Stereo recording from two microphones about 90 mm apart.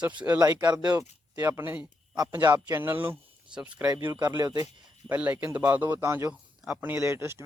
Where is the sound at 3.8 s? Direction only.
45° right (ahead or behind).